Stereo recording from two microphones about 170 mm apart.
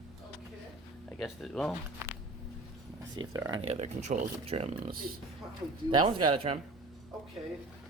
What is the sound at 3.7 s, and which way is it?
Speech, 40° right (ahead or behind).